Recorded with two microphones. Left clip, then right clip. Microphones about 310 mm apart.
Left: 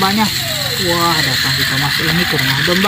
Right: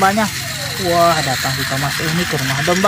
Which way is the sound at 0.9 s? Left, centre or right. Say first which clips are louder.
Right 3 dB; centre.